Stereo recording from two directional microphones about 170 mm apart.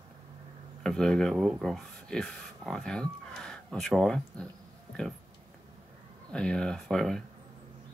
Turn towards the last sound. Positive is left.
turn(degrees=5)  # may be behind; listen again after turning